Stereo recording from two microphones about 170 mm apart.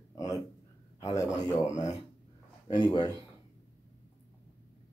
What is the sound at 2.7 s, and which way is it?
Speech, 25° left (ahead or behind).